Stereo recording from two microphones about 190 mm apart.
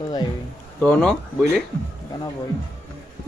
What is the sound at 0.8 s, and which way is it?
Speech, 5° left (ahead or behind).